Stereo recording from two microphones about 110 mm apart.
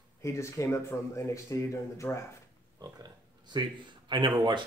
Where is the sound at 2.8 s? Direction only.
40° right (ahead or behind).